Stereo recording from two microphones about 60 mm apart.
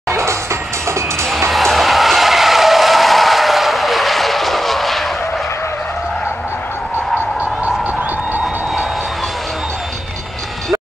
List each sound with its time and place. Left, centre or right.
0.1 s music: right
1.5 s skidding: centre